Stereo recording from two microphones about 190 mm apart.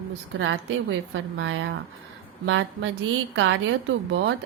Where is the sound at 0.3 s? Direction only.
80° right.